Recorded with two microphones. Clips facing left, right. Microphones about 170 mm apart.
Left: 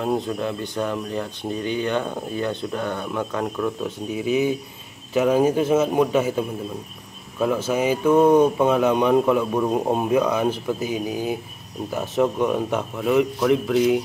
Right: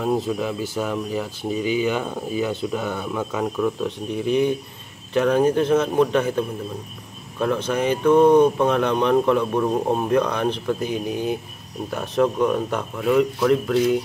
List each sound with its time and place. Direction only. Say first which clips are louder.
0.0 s speech: right 1 dB; centre (ahead or behind)